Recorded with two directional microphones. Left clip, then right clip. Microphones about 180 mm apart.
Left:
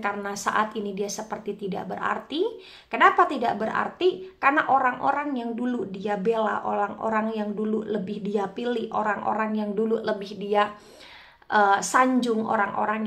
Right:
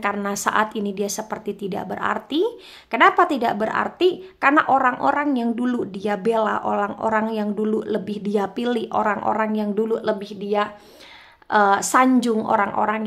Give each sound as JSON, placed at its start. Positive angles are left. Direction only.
{"t": 0.0, "sound": "a woman's voice", "side_deg": -30}